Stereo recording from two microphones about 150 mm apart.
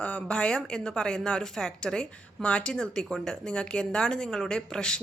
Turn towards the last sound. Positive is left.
turn(degrees=5)  # may be behind; listen again after turning